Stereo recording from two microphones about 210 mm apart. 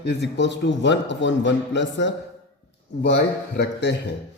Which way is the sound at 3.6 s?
55° left (ahead or behind).